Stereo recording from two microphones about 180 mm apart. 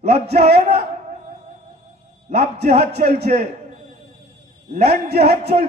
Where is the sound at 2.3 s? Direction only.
35° right (ahead or behind).